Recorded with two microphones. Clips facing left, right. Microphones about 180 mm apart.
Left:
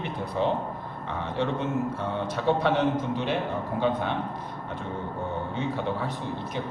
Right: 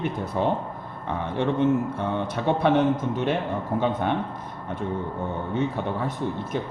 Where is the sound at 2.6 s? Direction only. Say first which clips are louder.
Right 4 dB; 50° right (ahead or behind).